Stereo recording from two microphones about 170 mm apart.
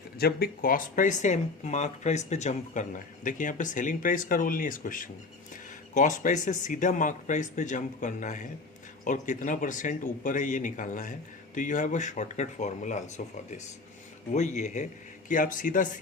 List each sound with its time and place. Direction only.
0.2 s speech: 65° left (ahead or behind)